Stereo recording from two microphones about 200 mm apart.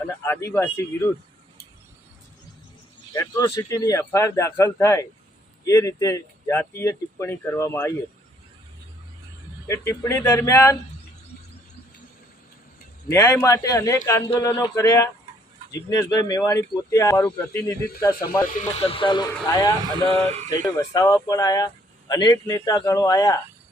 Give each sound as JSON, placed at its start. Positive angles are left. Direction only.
{"t": 0.1, "sound": "speech", "side_deg": 15}
{"t": 3.1, "sound": "speech", "side_deg": 15}
{"t": 9.6, "sound": "speech", "side_deg": 15}
{"t": 13.1, "sound": "speech", "side_deg": 15}
{"t": 18.8, "sound": "speech", "side_deg": 25}
{"t": 20.1, "sound": "speech", "side_deg": -30}
{"t": 20.5, "sound": "speech", "side_deg": 15}